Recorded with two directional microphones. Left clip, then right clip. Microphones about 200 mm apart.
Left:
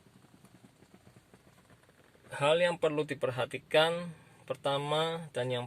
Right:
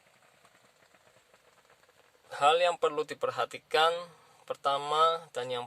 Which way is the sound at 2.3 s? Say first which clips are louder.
Right 3 dB; 15° right (ahead or behind).